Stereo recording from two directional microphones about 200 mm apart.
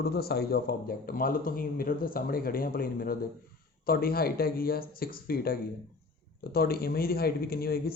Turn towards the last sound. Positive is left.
turn(degrees=50)  # may be behind; listen again after turning